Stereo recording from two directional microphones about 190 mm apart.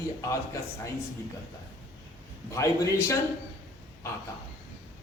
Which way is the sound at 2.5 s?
15° left (ahead or behind).